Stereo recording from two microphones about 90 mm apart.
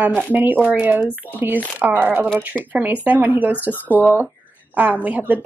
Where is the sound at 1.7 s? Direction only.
20° right (ahead or behind).